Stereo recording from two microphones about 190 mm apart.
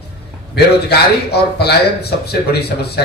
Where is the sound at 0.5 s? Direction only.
60° left (ahead or behind).